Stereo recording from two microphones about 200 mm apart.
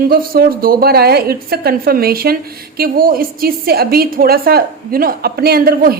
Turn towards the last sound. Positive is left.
turn(degrees=-50)  # may be behind; listen again after turning